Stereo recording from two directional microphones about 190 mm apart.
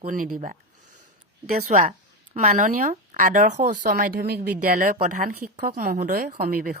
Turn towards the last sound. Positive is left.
turn(degrees=-45)  # may be behind; listen again after turning